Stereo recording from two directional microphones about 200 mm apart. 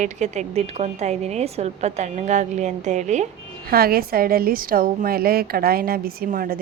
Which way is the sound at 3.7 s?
50° right (ahead or behind).